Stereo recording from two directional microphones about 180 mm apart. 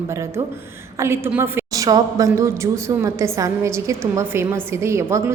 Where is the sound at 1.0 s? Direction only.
15° right (ahead or behind).